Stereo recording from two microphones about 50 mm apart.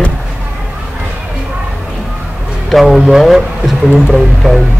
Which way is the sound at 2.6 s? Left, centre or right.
Centre.